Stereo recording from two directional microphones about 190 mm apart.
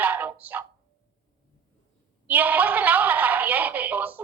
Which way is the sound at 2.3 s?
10° right (ahead or behind).